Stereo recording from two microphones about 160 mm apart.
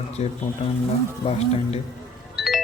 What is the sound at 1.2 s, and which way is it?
Speech, 35° left (ahead or behind).